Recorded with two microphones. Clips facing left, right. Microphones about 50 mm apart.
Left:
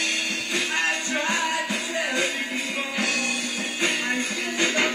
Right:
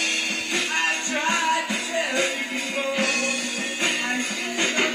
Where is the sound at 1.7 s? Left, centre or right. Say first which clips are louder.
Right 1 dB; right.